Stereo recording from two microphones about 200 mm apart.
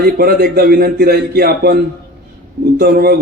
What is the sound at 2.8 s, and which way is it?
Speech, 50° right (ahead or behind).